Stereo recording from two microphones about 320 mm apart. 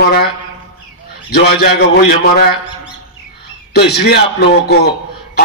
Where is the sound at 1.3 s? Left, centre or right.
Left.